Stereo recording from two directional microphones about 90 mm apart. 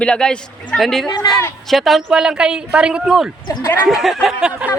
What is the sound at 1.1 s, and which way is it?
Speech, 45° left (ahead or behind).